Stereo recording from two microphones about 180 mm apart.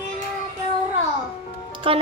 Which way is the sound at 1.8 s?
30° right (ahead or behind).